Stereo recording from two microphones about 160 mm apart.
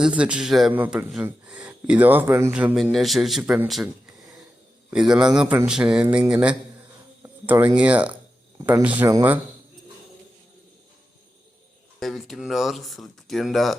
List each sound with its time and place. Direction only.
0.0 s speech: 5° right (ahead or behind)
4.9 s speech: 5° right (ahead or behind)
7.2 s insect: 15° right (ahead or behind)
7.8 s speech: 10° right (ahead or behind)
11.9 s speech: centre (ahead or behind)